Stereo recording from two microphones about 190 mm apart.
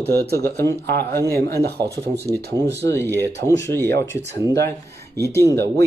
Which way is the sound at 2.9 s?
10° left (ahead or behind).